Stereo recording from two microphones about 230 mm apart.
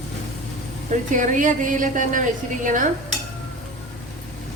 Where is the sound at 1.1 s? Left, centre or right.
Right.